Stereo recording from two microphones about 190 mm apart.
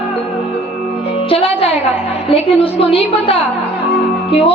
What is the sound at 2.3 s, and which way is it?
A woman's voice, 30° left (ahead or behind).